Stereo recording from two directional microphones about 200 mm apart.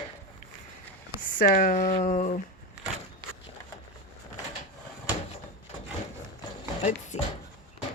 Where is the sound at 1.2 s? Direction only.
40° left (ahead or behind).